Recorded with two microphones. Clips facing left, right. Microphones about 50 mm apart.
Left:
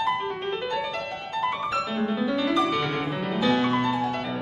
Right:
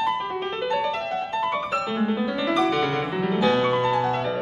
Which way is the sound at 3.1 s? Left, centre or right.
Centre.